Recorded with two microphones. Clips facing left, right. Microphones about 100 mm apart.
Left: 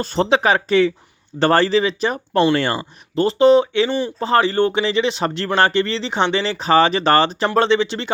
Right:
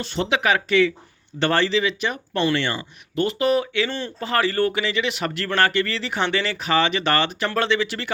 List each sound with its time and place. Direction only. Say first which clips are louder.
0.0 s speech: left 6 dB; 40° left (ahead or behind)
3.8 s speech: left 7 dB; 15° left (ahead or behind)
4.2 s speech: left 4 dB; 30° left (ahead or behind)